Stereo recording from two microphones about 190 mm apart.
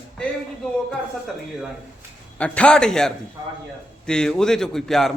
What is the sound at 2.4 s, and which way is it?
A man's voice, 5° left (ahead or behind).